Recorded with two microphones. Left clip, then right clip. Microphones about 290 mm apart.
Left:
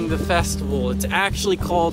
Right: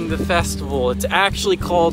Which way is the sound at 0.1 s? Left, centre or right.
Centre.